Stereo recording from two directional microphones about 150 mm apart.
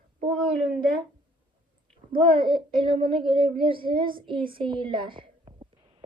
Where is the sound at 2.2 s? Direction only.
35° right (ahead or behind).